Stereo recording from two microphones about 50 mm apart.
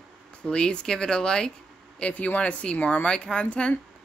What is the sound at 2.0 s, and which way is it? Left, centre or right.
A woman's voice, left.